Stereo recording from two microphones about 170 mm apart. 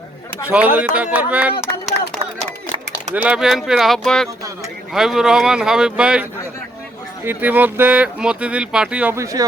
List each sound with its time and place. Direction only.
0.4 s speech: 10° right (ahead or behind)
3.2 s speech: 5° right (ahead or behind)
7.3 s speech: 10° right (ahead or behind)